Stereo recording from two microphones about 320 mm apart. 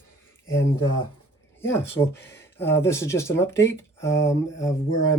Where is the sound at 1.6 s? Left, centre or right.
Centre.